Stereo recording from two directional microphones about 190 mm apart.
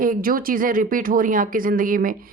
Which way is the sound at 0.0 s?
45° right (ahead or behind).